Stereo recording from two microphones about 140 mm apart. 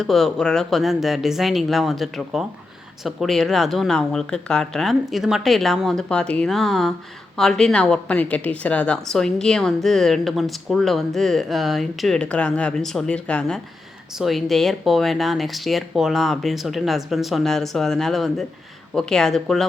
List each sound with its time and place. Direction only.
0.0 s a woman's voice: centre (ahead or behind)